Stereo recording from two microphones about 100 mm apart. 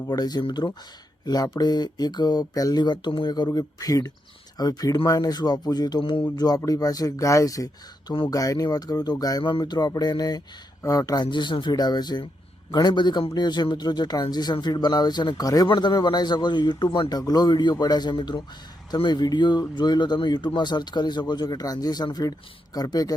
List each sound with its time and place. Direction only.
0.1 s speech: 40° left (ahead or behind)
9.4 s speech: 50° left (ahead or behind)